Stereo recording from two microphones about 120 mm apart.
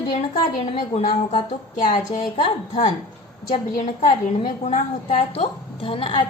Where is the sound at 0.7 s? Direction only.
45° left (ahead or behind).